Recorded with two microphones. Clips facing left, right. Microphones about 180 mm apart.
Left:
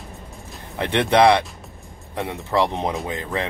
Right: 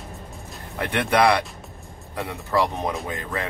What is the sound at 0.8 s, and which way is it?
Speech, 25° left (ahead or behind).